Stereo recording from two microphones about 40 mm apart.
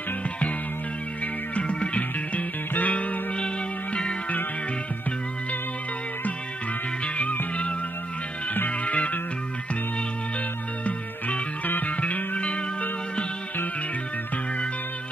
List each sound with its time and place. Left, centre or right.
1.2 s music: left
3.3 s music: left
8.6 s music: left
10.9 s music: left
12.4 s music: left